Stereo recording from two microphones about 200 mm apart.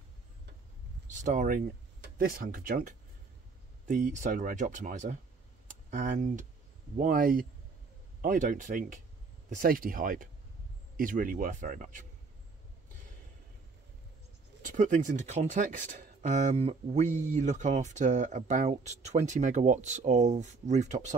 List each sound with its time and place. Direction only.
1.0 s speech: 35° right (ahead or behind)
14.6 s speech: 40° right (ahead or behind)